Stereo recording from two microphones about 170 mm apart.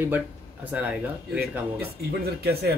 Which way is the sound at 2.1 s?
70° right (ahead or behind).